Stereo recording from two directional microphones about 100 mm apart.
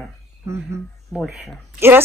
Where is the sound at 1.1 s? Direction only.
Centre (ahead or behind).